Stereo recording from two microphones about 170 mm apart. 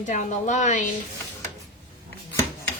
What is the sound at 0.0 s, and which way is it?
Speech, 45° left (ahead or behind).